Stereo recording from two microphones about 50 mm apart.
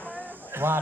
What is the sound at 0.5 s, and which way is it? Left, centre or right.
Speech, right.